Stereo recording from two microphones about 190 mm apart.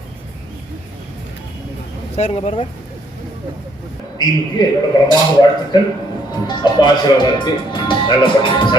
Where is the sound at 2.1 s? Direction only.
35° left (ahead or behind).